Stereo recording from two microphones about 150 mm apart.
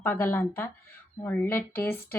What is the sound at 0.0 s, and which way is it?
A woman's voice, 15° left (ahead or behind).